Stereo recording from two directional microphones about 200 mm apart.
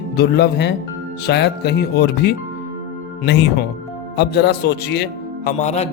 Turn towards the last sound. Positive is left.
turn(degrees=30)  # may be behind; listen again after turning